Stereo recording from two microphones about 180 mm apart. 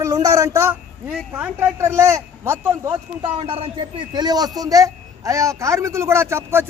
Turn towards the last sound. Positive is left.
turn(degrees=-15)  # may be behind; listen again after turning